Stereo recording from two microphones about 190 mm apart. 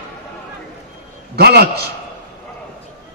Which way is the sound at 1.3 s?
60° right (ahead or behind).